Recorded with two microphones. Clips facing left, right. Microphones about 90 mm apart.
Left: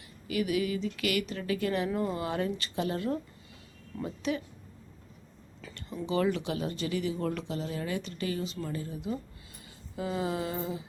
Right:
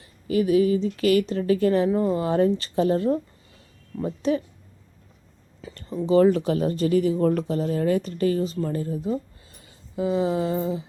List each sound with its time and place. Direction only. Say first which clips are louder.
0.3 s speech: right 10 dB; 30° right (ahead or behind)
5.7 s speech: right 11 dB; 35° right (ahead or behind)
9.9 s a sound: right 9 dB; 25° right (ahead or behind)